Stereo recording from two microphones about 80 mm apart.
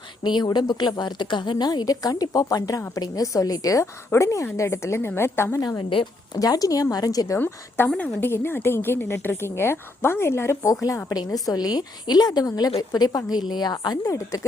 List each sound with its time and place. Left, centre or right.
0.2 s a woman's voice: left
5.5 s a woman's voice: left
7.3 s a woman's voice: left
8.3 s a woman's voice: left
14.0 s a woman's voice: left